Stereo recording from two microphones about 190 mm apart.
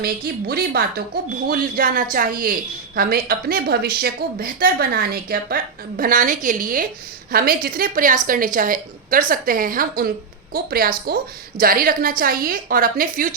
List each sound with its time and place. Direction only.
0.4 s speech: 55° right (ahead or behind)